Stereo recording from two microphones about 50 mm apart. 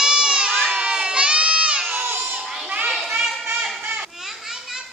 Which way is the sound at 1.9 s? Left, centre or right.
Right.